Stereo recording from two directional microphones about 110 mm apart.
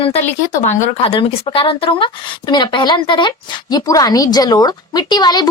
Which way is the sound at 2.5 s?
40° left (ahead or behind).